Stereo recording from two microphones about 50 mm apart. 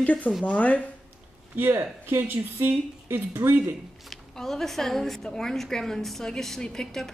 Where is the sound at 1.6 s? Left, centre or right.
Right.